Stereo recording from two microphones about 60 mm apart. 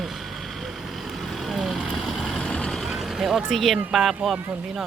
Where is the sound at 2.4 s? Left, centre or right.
Centre.